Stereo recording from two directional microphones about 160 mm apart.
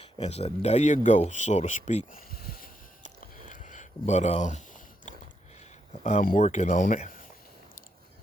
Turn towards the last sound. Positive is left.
turn(degrees=55)  # may be behind; listen again after turning